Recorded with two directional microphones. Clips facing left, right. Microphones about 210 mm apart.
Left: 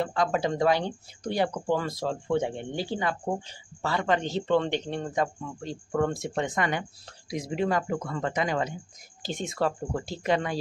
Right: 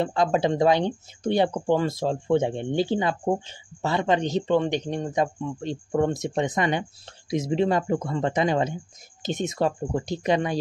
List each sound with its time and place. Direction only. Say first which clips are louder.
0.0 s speech: right 4 dB; 25° right (ahead or behind)